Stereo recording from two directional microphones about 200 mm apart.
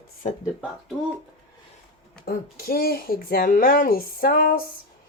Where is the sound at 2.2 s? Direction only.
50° left (ahead or behind).